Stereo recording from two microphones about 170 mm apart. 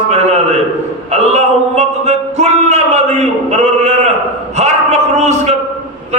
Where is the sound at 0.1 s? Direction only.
40° right (ahead or behind).